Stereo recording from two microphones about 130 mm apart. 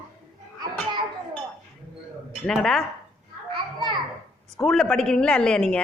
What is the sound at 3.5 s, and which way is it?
Children playing, 35° right (ahead or behind).